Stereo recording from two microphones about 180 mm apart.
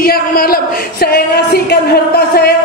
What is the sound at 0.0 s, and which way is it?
Speech, 55° left (ahead or behind).